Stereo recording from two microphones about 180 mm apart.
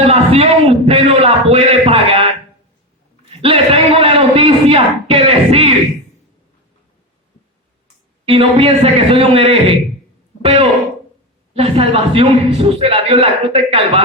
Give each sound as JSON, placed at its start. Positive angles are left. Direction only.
{"t": 0.0, "sound": "a man's voice", "side_deg": -30}
{"t": 3.2, "sound": "a man's voice", "side_deg": -30}
{"t": 8.2, "sound": "a man's voice", "side_deg": -30}